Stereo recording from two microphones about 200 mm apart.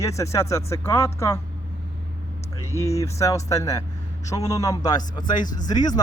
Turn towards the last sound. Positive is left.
turn(degrees=20)  # may be behind; listen again after turning